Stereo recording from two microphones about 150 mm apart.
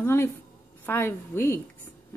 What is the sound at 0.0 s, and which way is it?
A woman's voice, 15° left (ahead or behind).